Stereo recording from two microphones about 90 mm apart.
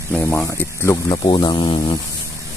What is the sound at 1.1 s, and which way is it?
Speech, 55° left (ahead or behind).